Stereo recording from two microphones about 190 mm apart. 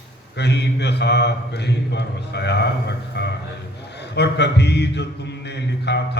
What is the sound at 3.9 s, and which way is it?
Mantra, 60° left (ahead or behind).